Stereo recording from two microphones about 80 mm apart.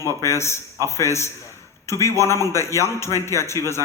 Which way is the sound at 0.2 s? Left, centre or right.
Left.